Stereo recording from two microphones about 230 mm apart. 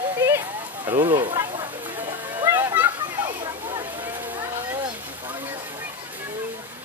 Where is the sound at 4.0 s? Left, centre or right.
Centre.